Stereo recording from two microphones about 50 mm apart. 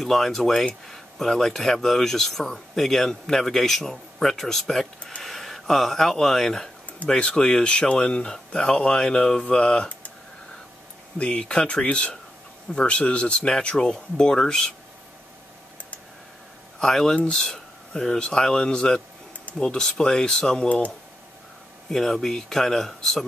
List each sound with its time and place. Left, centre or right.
0.0 s speech: centre
11.1 s speech: centre
16.8 s speech: centre
17.1 s speech: left
17.4 s speech: centre
20.6 s speech: left
21.9 s speech: centre